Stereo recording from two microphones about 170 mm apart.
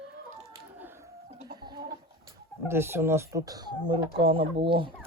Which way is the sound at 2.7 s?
15° right (ahead or behind).